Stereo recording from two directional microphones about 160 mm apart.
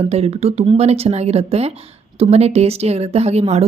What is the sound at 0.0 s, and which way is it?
Speech, 40° right (ahead or behind).